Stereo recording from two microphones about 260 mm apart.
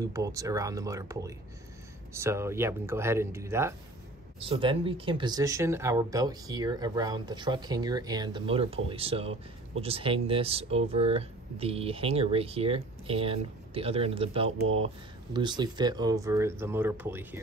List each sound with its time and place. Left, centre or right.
0.0 s speech: centre